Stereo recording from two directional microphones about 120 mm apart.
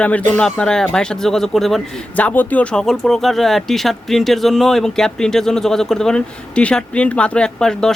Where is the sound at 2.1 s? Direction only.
15° left (ahead or behind).